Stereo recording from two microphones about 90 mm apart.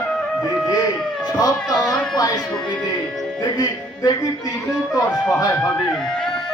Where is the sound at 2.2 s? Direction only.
45° left (ahead or behind).